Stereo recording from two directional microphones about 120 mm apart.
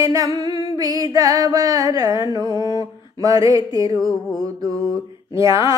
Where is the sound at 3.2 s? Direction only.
30° right (ahead or behind).